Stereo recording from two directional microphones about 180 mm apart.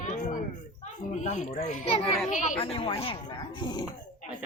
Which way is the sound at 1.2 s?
40° left (ahead or behind).